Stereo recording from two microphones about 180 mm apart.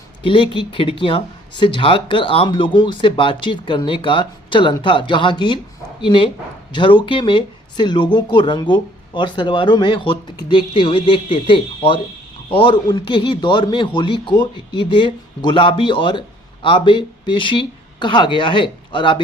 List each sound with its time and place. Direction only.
0.2 s speech: 30° left (ahead or behind)